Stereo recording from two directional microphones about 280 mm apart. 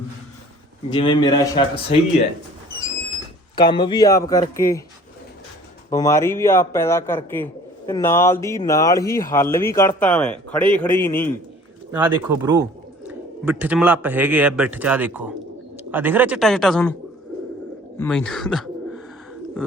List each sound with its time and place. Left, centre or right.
0.9 s a man's voice: centre
3.5 s a man's voice: centre
5.9 s a man's voice: centre
11.9 s speech: centre
17.9 s speech: centre